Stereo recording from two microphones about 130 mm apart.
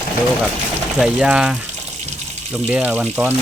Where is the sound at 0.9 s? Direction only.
5° right (ahead or behind).